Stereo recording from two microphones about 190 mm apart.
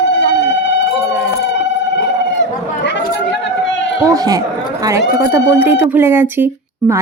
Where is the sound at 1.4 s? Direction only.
65° left (ahead or behind).